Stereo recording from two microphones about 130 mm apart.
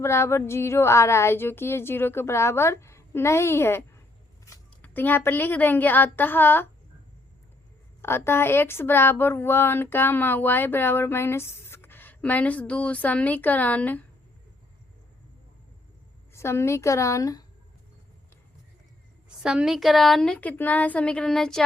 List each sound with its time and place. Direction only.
0.0 s a woman's voice: 20° left (ahead or behind)
8.0 s speech: 20° left (ahead or behind)
16.3 s a woman's voice: 20° left (ahead or behind)
19.4 s a woman's voice: 5° right (ahead or behind)